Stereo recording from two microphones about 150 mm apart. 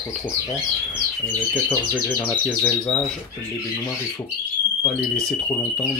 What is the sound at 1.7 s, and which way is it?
Speech, 15° left (ahead or behind).